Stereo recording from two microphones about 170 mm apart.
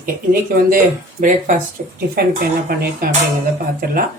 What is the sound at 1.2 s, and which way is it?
Speech, 50° right (ahead or behind).